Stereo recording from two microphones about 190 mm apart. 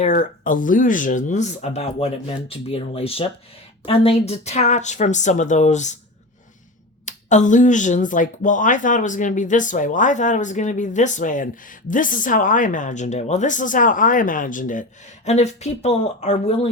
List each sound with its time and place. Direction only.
0.0 s speech: 40° left (ahead or behind)
7.0 s speech: 40° left (ahead or behind)